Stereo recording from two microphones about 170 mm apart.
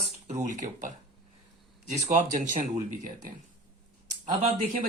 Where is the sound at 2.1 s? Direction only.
50° right (ahead or behind).